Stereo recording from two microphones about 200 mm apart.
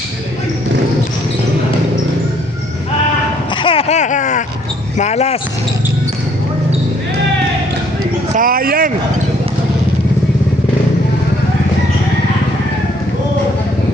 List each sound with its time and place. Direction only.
3.5 s a sound: 25° left (ahead or behind)
4.9 s speech: 35° left (ahead or behind)
8.4 s speech: 45° right (ahead or behind)